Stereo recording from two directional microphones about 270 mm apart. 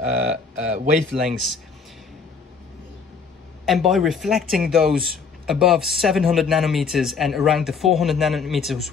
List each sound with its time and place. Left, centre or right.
0.0 s a sound: right
1.2 s speech: centre
3.6 s speech: centre